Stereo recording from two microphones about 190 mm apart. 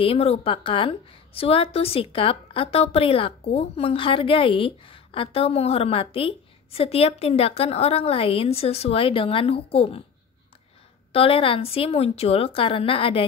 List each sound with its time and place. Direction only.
0.0 s a woman's voice: 30° left (ahead or behind)
11.1 s a woman's voice: 30° left (ahead or behind)